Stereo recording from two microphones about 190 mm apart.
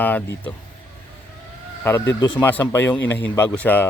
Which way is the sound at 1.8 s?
10° left (ahead or behind).